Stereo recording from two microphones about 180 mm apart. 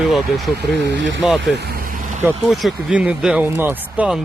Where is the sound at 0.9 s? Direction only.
85° right.